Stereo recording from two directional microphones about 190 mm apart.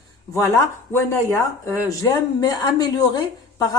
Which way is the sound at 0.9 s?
15° left (ahead or behind).